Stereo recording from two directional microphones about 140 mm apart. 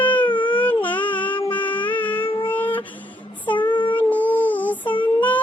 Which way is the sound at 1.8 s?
10° left (ahead or behind).